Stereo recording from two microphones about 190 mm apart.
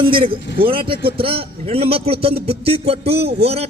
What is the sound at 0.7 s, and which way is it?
A man's voice, 30° right (ahead or behind).